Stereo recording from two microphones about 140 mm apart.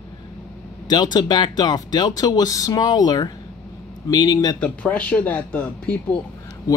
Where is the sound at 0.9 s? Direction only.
30° left (ahead or behind).